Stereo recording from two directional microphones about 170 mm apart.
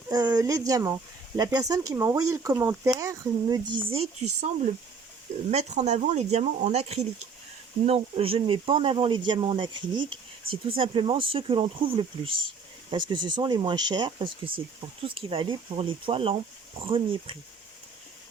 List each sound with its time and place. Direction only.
0.1 s speech: 20° right (ahead or behind)
3.8 s speech: 35° right (ahead or behind)